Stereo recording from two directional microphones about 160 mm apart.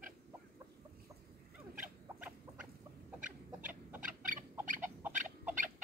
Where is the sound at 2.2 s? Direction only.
5° right (ahead or behind).